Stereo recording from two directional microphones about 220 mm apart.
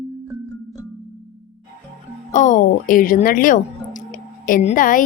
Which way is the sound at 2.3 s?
35° left (ahead or behind).